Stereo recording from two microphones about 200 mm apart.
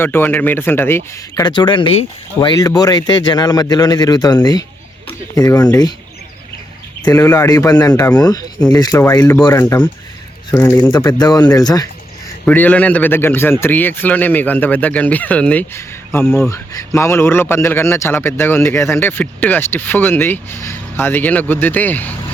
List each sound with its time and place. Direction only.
0.0 s speech: 10° left (ahead or behind)
7.0 s speech: 15° left (ahead or behind)
12.5 s speech: 5° left (ahead or behind)